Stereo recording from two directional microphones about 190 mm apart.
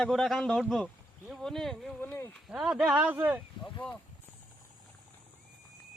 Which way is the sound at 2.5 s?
5° right (ahead or behind).